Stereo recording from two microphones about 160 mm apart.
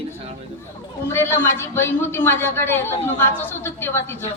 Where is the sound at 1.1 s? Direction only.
15° left (ahead or behind).